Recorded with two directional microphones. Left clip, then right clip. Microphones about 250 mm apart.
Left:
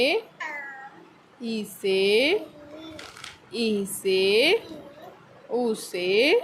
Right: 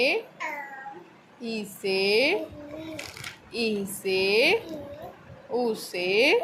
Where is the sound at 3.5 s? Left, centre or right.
Centre.